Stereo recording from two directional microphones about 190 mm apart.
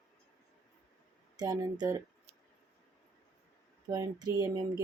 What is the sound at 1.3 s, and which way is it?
Speech, 20° right (ahead or behind).